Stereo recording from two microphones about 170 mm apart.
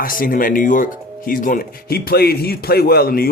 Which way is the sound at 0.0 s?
55° left (ahead or behind).